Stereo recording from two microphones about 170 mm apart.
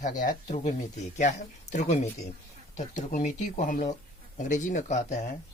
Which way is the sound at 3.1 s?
50° left (ahead or behind).